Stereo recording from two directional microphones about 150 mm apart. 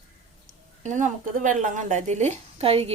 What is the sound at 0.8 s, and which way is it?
Speech, 55° right (ahead or behind).